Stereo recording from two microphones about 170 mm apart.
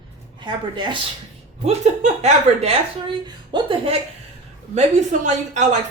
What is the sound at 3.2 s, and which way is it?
Speech, 30° right (ahead or behind).